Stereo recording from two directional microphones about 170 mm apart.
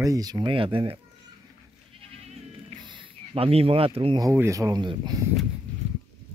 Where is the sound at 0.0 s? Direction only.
20° right (ahead or behind).